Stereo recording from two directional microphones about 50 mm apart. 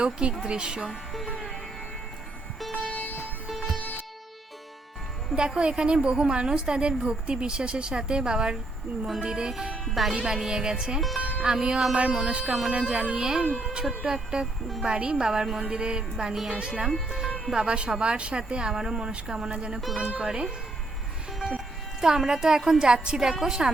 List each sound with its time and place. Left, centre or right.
0.0 s a woman's voice: right
0.9 s music: centre
2.9 s music: left
5.3 s a woman's voice: centre
10.2 s a woman's voice: centre
11.2 s music: right
11.5 s a woman's voice: centre
17.6 s a woman's voice: centre
21.3 s music: centre
22.0 s a woman's voice: centre